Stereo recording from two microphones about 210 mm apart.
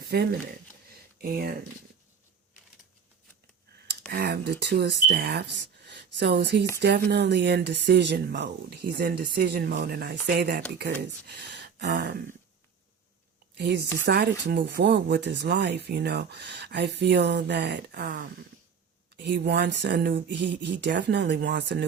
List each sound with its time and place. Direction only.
0.1 s speech: 50° right (ahead or behind)
4.1 s speech: 50° right (ahead or behind)
10.9 s speech: 5° left (ahead or behind)
11.3 s a sound: 55° right (ahead or behind)
13.6 s speech: 50° right (ahead or behind)